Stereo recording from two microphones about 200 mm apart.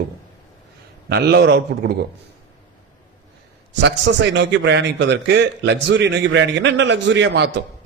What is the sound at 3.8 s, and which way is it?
A man's voice, 60° right (ahead or behind).